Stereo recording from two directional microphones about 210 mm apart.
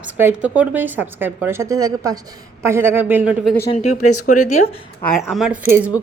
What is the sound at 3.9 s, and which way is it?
Speech, 90° left.